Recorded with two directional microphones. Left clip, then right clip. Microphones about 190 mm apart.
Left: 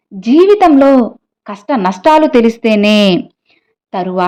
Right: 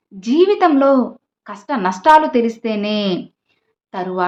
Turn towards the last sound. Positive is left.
turn(degrees=35)  # may be behind; listen again after turning